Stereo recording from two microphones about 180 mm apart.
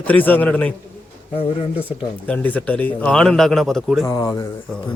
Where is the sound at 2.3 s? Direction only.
10° left (ahead or behind).